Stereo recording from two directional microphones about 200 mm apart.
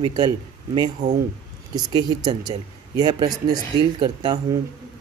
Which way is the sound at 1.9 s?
20° right (ahead or behind).